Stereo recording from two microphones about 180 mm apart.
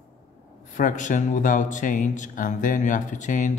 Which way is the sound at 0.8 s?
45° left (ahead or behind).